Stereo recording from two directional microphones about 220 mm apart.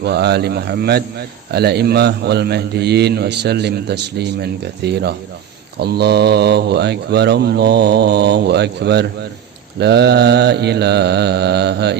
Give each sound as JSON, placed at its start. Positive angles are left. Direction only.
{"t": 0.0, "sound": "a man's voice", "side_deg": -50}